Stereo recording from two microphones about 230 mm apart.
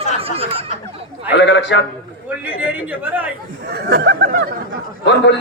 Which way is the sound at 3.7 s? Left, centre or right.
Right.